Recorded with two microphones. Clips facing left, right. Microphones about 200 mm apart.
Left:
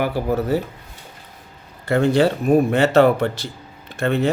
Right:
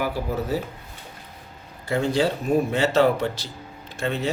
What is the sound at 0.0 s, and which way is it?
Speech, 65° left (ahead or behind).